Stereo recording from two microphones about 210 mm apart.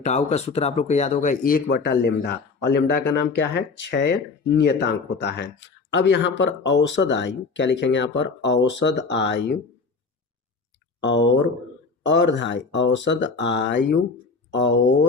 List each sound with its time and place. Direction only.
0.0 s speech: 35° left (ahead or behind); by 9.5 s 55° left (ahead or behind)
11.0 s speech: 60° left (ahead or behind)